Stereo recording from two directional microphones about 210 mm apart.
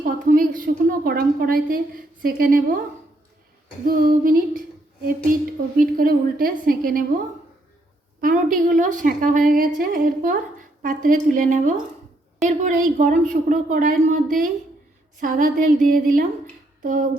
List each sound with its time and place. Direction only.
0.0 s a woman's voice: 40° right (ahead or behind)
3.8 s a woman's voice: 45° right (ahead or behind)
5.8 s a woman's voice: 40° right (ahead or behind)
8.2 s a woman's voice: 40° right (ahead or behind)